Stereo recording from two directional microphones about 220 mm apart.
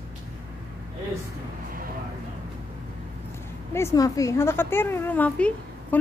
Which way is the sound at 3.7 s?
15° left (ahead or behind).